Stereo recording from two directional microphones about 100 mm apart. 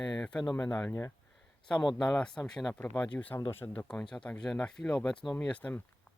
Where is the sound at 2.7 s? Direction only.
15° left (ahead or behind).